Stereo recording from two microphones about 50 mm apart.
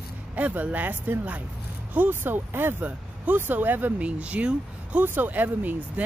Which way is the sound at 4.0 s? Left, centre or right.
Right.